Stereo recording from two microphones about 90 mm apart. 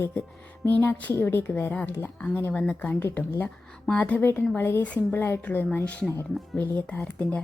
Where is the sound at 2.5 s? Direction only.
10° left (ahead or behind).